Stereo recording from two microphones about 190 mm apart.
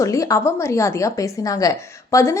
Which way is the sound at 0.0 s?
15° left (ahead or behind).